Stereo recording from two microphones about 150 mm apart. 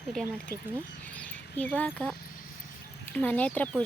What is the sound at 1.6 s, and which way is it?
Speech, 10° left (ahead or behind).